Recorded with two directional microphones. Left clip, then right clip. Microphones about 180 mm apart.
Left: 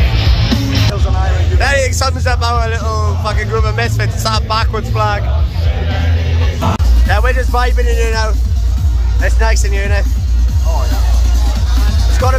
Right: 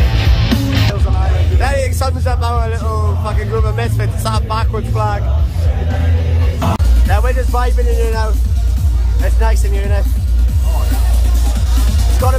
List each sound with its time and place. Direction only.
0.1 s music: centre (ahead or behind)
1.6 s music: 20° right (ahead or behind)
2.9 s speech: 25° right (ahead or behind)
7.1 s speech: 15° right (ahead or behind)
12.2 s speech: 10° right (ahead or behind)